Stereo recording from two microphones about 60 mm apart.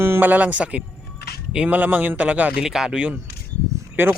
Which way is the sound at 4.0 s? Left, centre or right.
Right.